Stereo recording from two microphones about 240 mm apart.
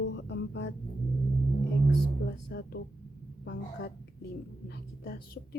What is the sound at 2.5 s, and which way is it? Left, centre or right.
Speech, left.